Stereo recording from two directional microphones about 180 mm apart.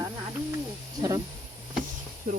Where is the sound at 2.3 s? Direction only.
50° right (ahead or behind).